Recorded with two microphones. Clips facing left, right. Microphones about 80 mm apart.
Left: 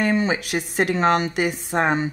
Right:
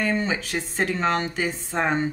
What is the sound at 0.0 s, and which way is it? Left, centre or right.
Speech, centre.